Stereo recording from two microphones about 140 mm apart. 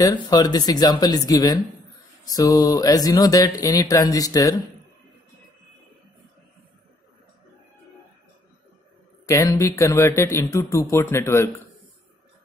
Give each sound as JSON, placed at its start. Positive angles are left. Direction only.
{"t": 0.0, "sound": "speech", "side_deg": 30}
{"t": 9.2, "sound": "speech", "side_deg": 20}